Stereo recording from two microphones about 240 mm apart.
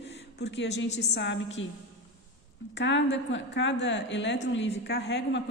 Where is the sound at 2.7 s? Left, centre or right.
Left.